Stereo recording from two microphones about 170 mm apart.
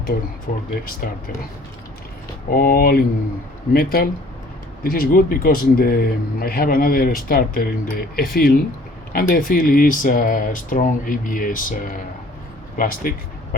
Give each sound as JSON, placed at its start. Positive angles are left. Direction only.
{"t": 0.5, "sound": "speech", "side_deg": 50}
{"t": 2.5, "sound": "speech", "side_deg": 60}